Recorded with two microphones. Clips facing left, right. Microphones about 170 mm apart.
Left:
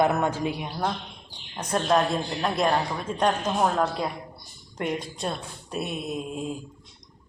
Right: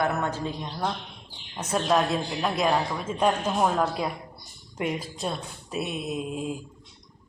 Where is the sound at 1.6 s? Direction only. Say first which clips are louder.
Left 1 dB; 5° right (ahead or behind).